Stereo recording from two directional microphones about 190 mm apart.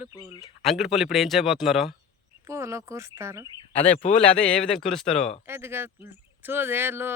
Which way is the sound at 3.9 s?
35° left (ahead or behind).